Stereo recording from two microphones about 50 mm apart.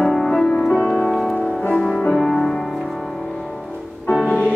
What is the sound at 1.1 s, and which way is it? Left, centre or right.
Music, centre.